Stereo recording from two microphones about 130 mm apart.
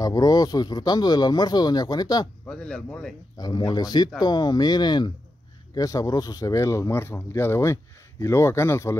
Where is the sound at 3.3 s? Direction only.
30° left (ahead or behind).